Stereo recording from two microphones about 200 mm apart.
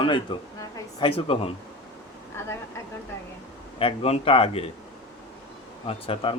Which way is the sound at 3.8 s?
30° left (ahead or behind).